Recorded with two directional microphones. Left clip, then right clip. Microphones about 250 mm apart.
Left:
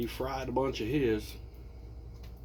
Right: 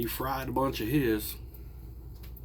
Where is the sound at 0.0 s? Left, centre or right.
Right.